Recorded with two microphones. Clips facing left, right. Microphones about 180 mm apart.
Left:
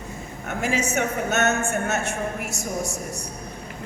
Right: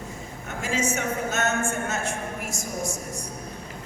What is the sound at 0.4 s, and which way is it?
A man's voice, 65° left (ahead or behind).